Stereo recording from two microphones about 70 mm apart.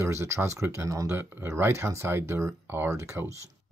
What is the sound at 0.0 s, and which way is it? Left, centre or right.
Speech, right.